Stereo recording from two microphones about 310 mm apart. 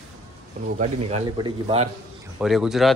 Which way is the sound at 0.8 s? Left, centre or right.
Centre.